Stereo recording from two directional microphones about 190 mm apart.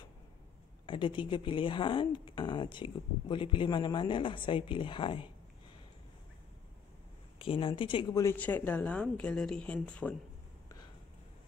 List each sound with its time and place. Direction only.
0.8 s a woman's voice: 25° left (ahead or behind)
7.3 s speech: 30° left (ahead or behind); by 10.1 s 5° left (ahead or behind)